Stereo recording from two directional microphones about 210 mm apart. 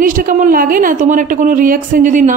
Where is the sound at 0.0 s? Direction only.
40° right (ahead or behind).